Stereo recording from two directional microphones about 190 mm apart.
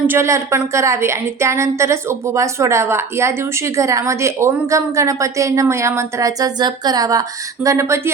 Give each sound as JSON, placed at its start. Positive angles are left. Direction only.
{"t": 0.1, "sound": "a woman's voice", "side_deg": -15}